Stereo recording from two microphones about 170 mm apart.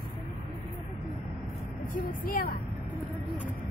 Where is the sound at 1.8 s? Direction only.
55° left (ahead or behind).